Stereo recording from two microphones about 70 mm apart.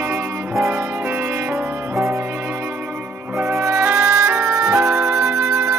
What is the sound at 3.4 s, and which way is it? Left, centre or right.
Music, right.